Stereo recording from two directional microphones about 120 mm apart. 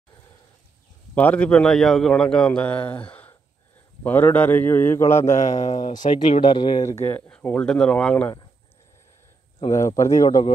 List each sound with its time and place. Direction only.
1.1 s a man's voice: 10° left (ahead or behind)
2.9 s a sound: 15° left (ahead or behind)
4.0 s a man's voice: 15° left (ahead or behind)
5.4 s speech: 80° left
6.4 s speech: 40° left (ahead or behind)
6.9 s a man's voice: 20° left (ahead or behind)
9.7 s speech: 25° left (ahead or behind)